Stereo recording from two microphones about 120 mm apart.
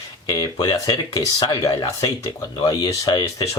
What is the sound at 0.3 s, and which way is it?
Speech, 35° left (ahead or behind).